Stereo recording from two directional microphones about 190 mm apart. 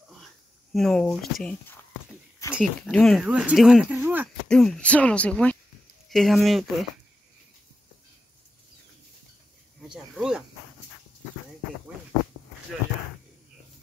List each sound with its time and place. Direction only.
0.7 s speech: 5° left (ahead or behind)
2.4 s a sound: 15° left (ahead or behind)
2.9 s speech: 5° left (ahead or behind)
4.5 s speech: 5° left (ahead or behind)
9.8 s speech: 5° right (ahead or behind)